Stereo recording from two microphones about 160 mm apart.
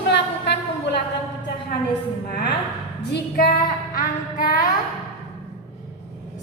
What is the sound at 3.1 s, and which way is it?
Female singing, 80° left.